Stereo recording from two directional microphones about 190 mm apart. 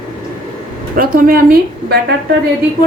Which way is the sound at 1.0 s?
50° right (ahead or behind).